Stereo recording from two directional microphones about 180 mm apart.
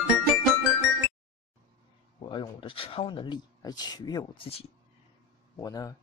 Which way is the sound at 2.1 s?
25° left (ahead or behind).